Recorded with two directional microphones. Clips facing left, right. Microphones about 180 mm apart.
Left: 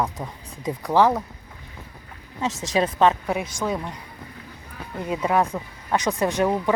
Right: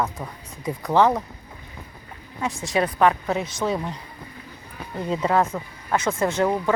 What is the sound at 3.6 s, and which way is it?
Speech, 5° right (ahead or behind).